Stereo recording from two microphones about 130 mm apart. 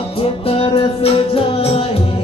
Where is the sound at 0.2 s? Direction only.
45° left (ahead or behind).